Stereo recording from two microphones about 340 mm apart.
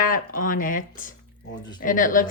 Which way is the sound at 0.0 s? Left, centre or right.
Left.